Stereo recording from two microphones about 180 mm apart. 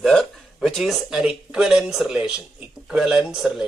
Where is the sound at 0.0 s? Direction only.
Centre (ahead or behind).